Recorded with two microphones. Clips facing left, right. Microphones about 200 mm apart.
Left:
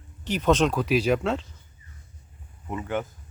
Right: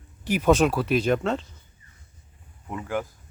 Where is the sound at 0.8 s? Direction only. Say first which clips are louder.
Even; 5° left (ahead or behind).